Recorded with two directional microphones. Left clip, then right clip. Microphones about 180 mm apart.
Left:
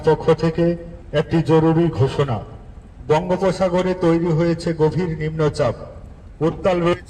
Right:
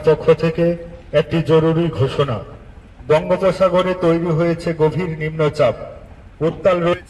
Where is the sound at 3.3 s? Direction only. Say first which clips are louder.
Right 4 dB; 25° left (ahead or behind).